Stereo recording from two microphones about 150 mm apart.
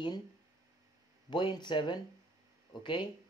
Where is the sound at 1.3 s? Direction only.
30° left (ahead or behind).